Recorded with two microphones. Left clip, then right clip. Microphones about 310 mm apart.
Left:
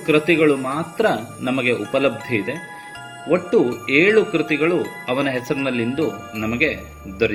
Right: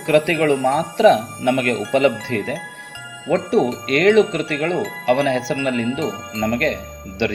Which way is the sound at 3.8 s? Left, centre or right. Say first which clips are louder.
Right 2 dB; centre.